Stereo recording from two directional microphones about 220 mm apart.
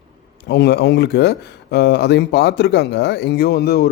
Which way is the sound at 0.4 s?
45° left (ahead or behind).